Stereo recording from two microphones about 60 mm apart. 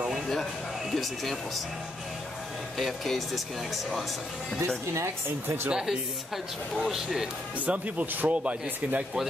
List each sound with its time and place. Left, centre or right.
0.9 s speech: centre
2.8 s speech: centre
4.9 s speech: right
5.7 s speech: centre
7.6 s speech: right